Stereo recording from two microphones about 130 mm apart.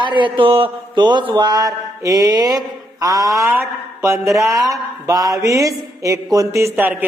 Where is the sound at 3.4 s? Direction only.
20° right (ahead or behind).